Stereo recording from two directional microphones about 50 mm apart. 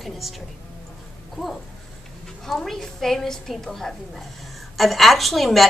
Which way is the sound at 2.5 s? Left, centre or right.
Centre.